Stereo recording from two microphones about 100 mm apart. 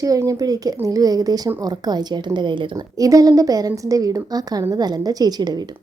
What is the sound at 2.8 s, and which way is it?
A woman's voice, 35° right (ahead or behind).